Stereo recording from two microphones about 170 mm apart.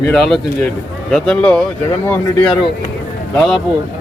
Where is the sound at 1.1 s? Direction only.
5° left (ahead or behind).